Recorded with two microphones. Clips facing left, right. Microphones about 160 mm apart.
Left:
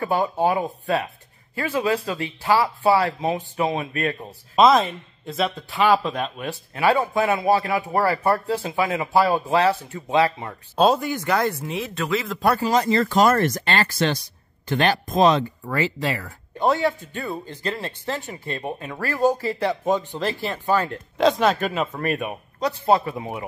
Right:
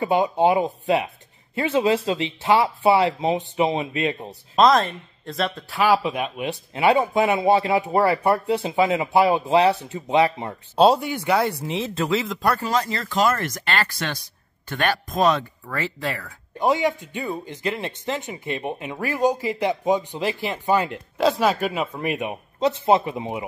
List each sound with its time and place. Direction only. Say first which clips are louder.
0.0 s speech: right 2 dB; 20° right (ahead or behind)
4.3 s speech: left 1 dB; 5° left (ahead or behind)
11.6 s speech: right 2 dB; 25° right (ahead or behind)
12.4 s speech: left 2 dB; 10° left (ahead or behind)
13.0 s speech: left 4 dB; 40° left (ahead or behind); by 15.7 s 25° left (ahead or behind)
15.7 s speech: left 3 dB; 10° left (ahead or behind)
16.5 s a man's voice: even; 15° right (ahead or behind)